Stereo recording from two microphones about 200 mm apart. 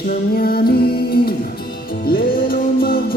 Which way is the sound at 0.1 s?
50° left (ahead or behind).